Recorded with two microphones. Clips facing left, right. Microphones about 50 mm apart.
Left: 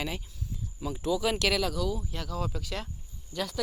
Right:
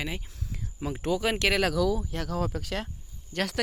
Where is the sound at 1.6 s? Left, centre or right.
Right.